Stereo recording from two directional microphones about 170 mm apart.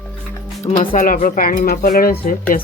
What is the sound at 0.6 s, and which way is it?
Speech, 50° left (ahead or behind).